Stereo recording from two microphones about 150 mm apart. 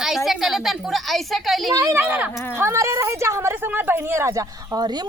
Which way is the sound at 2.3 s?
15° left (ahead or behind).